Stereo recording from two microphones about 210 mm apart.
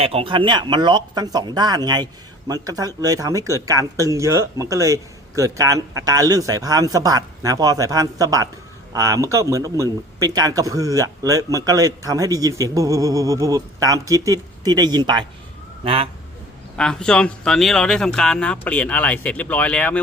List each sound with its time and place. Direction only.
0.0 s a man's voice: 30° right (ahead or behind)
16.7 s speech: 5° left (ahead or behind)